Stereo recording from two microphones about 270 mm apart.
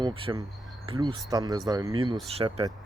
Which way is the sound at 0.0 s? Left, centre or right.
Centre.